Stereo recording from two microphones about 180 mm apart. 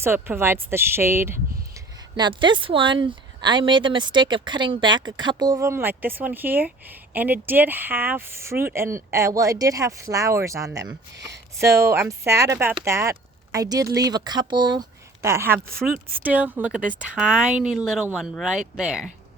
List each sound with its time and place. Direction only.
0.0 s speech: 15° right (ahead or behind)
2.1 s speech: 25° right (ahead or behind); by 19.1 s 5° right (ahead or behind)